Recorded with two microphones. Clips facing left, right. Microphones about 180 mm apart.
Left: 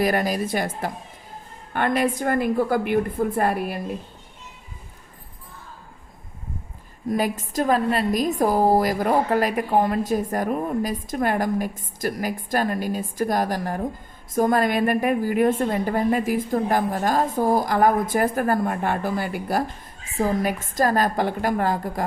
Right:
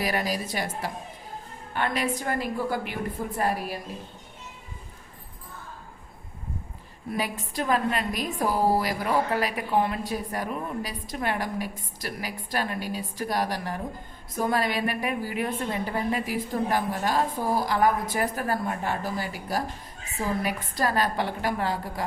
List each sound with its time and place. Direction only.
0.0 s a woman's voice: 50° left (ahead or behind)
7.1 s a woman's voice: 45° left (ahead or behind)